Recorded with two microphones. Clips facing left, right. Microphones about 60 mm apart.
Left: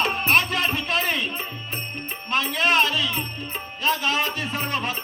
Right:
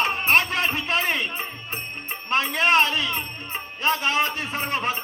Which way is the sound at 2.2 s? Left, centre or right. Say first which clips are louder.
Right 1 dB; right.